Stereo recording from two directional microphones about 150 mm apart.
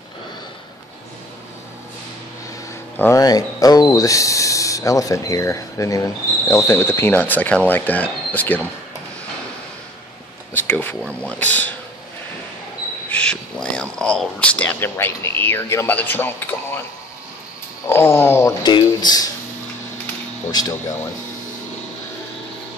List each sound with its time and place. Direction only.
3.0 s speech: 20° left (ahead or behind)
10.5 s speech: 15° left (ahead or behind)
13.1 s speech: 5° left (ahead or behind)
17.8 s speech: 15° left (ahead or behind)
18.6 s speech: 30° left (ahead or behind)